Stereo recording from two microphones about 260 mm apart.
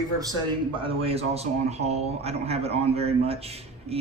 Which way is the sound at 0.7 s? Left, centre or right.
Right.